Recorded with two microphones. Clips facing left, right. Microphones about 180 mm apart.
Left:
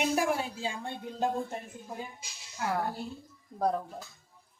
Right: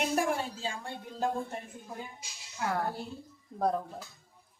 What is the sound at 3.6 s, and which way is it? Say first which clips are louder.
Speech: even; centre (ahead or behind).